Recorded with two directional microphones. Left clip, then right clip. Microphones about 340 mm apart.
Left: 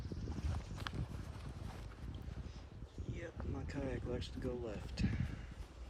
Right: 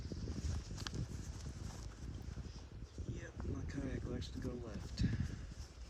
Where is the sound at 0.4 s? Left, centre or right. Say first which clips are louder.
Left 1 dB; centre.